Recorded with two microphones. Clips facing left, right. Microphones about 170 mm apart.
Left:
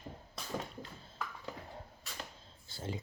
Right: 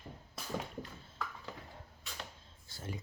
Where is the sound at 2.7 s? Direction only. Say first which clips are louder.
Left 3 dB; 25° left (ahead or behind).